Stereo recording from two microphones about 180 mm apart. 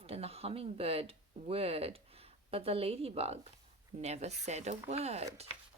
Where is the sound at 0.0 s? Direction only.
35° right (ahead or behind).